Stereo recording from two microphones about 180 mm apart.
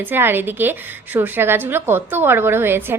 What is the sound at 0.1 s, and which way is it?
A woman's voice, 10° right (ahead or behind).